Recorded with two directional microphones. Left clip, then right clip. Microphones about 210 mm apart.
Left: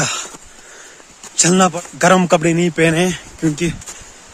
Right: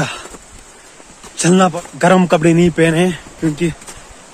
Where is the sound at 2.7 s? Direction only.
15° left (ahead or behind).